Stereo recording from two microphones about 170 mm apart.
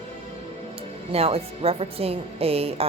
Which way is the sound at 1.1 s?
35° right (ahead or behind).